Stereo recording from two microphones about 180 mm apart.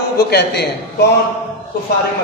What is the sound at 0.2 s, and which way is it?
Speech, 60° left (ahead or behind).